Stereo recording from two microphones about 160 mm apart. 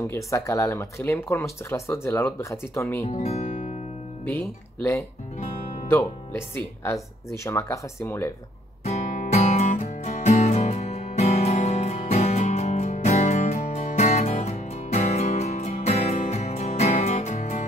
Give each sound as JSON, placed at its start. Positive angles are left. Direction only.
{"t": 0.0, "sound": "speech", "side_deg": 20}
{"t": 3.1, "sound": "speech", "side_deg": 40}
{"t": 5.9, "sound": "speech", "side_deg": 15}
{"t": 8.8, "sound": "music", "side_deg": 45}